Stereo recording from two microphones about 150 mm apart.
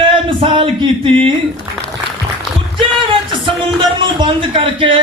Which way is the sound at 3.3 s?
35° right (ahead or behind).